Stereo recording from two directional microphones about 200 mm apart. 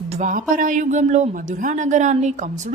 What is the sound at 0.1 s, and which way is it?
Speech, 40° right (ahead or behind).